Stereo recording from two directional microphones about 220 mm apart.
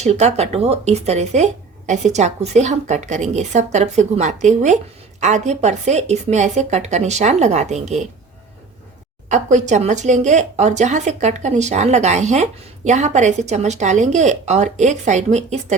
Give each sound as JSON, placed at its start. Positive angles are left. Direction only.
{"t": 0.0, "sound": "speech", "side_deg": -30}
{"t": 9.3, "sound": "speech", "side_deg": -35}